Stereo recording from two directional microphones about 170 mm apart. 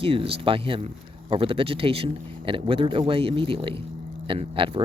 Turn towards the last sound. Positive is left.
turn(degrees=-30)  # may be behind; listen again after turning